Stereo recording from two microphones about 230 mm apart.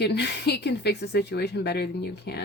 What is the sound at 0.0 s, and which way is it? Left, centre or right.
Speech, left.